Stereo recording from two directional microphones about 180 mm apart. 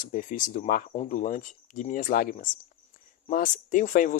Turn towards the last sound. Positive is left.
turn(degrees=45)  # may be behind; listen again after turning